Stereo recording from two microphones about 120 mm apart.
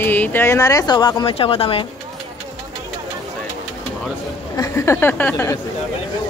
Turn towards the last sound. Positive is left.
turn(degrees=20)  # may be behind; listen again after turning